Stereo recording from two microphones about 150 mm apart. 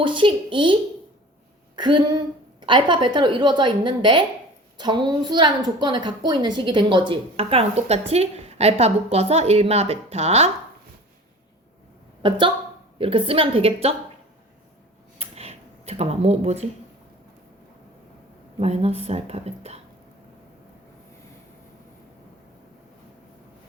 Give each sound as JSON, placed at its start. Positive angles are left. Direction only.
{"t": 0.0, "sound": "a woman's voice", "side_deg": -35}
{"t": 12.2, "sound": "a woman's voice", "side_deg": -35}
{"t": 15.2, "sound": "a sound", "side_deg": -45}
{"t": 18.6, "sound": "a woman's voice", "side_deg": -45}